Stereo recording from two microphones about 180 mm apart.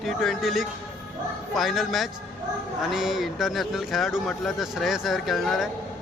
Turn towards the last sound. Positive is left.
turn(degrees=0)  # may be behind; listen again after turning